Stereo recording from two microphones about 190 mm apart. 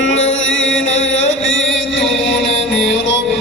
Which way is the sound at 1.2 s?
80° left.